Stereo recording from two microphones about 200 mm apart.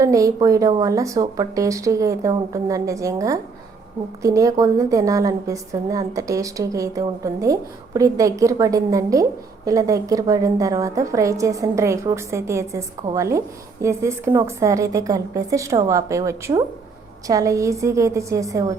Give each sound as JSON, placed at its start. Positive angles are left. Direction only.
{"t": 0.0, "sound": "a woman's voice", "side_deg": -15}